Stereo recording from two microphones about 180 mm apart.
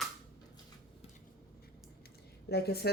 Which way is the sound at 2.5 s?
60° left (ahead or behind).